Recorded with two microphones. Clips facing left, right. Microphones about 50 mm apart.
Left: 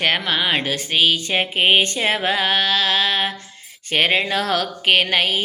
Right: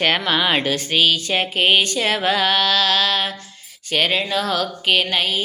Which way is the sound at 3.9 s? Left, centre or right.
Left.